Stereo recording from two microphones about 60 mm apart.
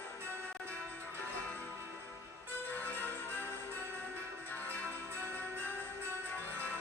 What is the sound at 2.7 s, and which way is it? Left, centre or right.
Music, left.